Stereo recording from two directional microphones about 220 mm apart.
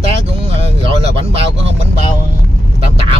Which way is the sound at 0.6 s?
25° right (ahead or behind).